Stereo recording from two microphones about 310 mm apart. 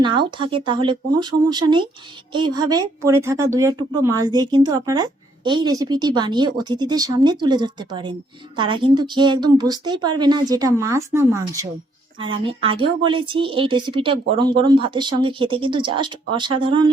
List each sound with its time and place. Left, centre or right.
0.0 s speech: centre